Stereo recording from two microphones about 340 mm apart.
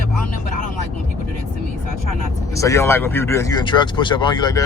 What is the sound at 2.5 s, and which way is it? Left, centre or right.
Speech, centre.